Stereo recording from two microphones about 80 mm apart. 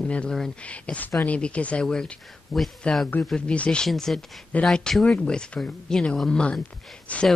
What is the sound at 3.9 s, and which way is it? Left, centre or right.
Speech, centre.